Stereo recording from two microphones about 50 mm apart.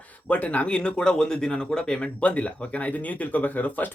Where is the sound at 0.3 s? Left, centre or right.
Left; by 2.0 s centre.